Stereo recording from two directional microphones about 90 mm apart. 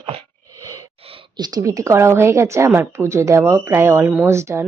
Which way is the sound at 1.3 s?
50° right (ahead or behind).